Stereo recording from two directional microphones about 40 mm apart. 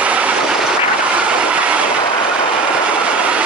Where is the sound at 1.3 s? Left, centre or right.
Right.